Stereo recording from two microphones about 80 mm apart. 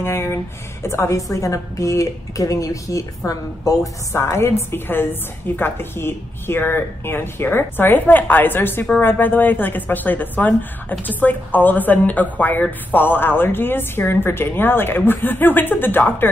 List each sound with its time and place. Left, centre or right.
0.0 s a woman's voice: left
4.2 s a woman's voice: left